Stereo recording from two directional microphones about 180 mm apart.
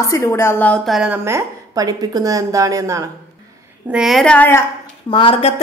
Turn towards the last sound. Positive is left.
turn(degrees=30)  # may be behind; listen again after turning